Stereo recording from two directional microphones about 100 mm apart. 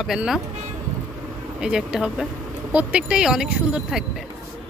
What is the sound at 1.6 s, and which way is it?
Speech, 5° right (ahead or behind).